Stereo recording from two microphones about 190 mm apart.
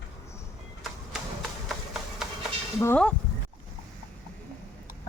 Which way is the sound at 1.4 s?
Centre (ahead or behind).